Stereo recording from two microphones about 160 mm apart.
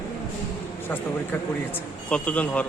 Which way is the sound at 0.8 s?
10° left (ahead or behind).